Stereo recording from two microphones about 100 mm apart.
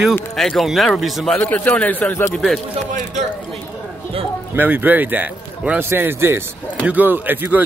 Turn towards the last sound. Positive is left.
turn(degrees=-20)  # may be behind; listen again after turning